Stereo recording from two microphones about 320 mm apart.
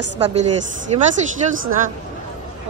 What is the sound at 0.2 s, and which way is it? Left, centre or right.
Speech, centre.